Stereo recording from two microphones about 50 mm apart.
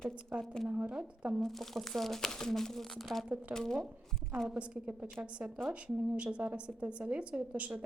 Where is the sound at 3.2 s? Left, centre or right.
Right.